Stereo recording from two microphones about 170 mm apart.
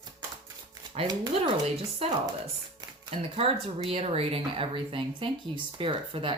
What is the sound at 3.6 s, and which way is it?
Speech, 35° right (ahead or behind).